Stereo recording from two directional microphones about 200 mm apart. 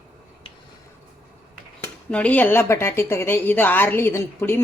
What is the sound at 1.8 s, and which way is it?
Speech, 5° left (ahead or behind).